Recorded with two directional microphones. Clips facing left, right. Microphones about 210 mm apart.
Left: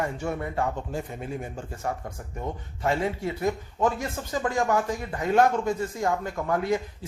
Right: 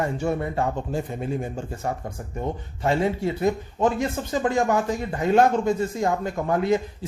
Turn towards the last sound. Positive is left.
turn(degrees=-25)  # may be behind; listen again after turning